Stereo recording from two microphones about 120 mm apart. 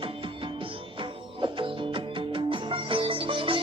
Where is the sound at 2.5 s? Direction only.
45° right (ahead or behind).